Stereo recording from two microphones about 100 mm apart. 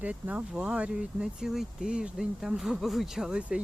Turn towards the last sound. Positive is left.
turn(degrees=-10)  # may be behind; listen again after turning